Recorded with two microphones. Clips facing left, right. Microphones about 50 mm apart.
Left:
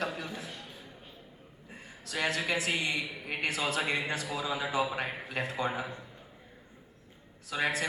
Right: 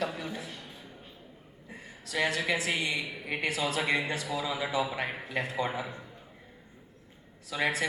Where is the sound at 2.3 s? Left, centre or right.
Left.